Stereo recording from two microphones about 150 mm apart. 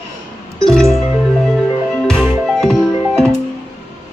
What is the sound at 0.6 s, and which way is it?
Music, 5° left (ahead or behind).